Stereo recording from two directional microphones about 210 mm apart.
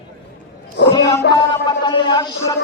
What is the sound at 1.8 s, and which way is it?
Speech, 20° left (ahead or behind).